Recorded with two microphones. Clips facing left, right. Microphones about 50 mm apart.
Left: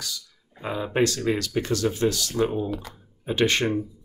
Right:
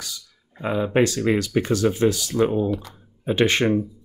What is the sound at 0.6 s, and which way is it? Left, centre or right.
Speech, right.